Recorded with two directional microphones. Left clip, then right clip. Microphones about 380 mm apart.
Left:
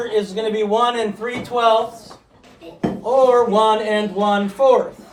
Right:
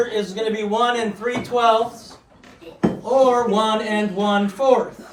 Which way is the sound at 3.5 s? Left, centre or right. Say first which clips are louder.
Left 4 dB; centre.